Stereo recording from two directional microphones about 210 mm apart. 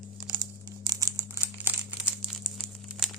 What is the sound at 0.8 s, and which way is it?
Crumpling, 15° right (ahead or behind).